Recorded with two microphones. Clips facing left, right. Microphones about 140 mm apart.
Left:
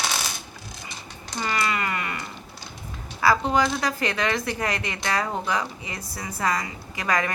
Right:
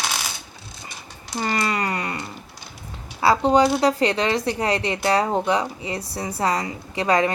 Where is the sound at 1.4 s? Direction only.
35° right (ahead or behind).